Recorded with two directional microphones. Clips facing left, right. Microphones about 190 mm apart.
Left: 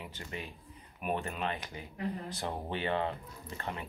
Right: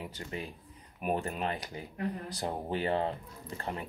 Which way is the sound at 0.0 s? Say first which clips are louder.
Right 3 dB; 35° right (ahead or behind).